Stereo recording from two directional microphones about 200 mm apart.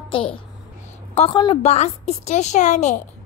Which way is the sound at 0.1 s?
25° left (ahead or behind).